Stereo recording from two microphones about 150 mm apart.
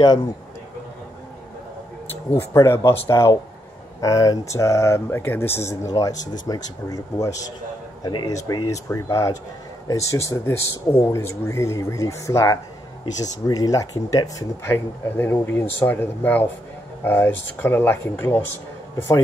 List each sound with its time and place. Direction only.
2.3 s speech: 15° left (ahead or behind)